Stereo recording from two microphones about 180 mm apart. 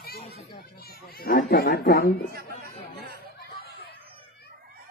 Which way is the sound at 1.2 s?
55° left (ahead or behind).